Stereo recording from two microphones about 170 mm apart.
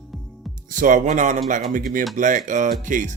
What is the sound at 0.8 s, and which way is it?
Speech, 50° right (ahead or behind).